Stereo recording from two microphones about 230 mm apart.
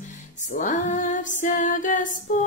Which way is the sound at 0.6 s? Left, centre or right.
Left.